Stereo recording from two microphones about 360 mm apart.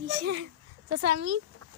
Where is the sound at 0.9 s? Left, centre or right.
Right.